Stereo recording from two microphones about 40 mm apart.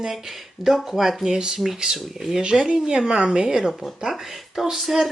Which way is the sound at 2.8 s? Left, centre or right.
Centre.